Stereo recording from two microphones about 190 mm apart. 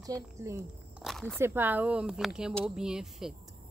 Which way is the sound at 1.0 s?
Centre (ahead or behind).